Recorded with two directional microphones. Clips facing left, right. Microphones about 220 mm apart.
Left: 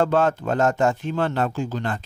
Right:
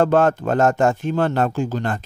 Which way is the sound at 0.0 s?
50° right (ahead or behind).